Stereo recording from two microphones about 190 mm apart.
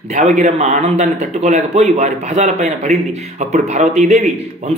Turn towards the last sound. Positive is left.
turn(degrees=-35)  # may be behind; listen again after turning